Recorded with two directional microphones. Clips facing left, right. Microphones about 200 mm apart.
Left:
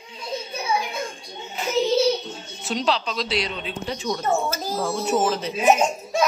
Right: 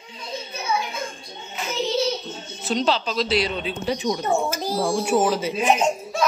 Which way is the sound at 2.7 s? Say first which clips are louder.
Right 2 dB; centre (ahead or behind).